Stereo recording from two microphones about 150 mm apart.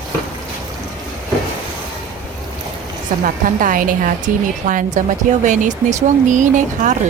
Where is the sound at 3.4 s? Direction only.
65° right (ahead or behind).